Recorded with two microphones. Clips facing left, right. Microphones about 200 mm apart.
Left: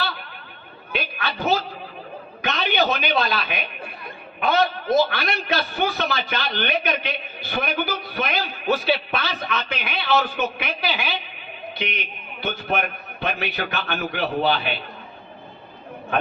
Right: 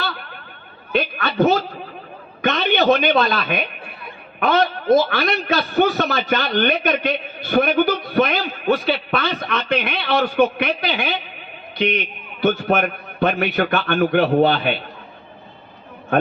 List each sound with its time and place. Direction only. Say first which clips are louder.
0.9 s a man's voice: right 9 dB; 50° right (ahead or behind)